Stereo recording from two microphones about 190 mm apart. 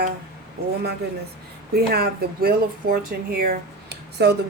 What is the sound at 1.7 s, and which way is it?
Speech, 55° right (ahead or behind).